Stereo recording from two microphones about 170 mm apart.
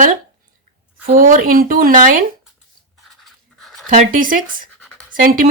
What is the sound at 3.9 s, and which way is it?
Speech, 50° right (ahead or behind).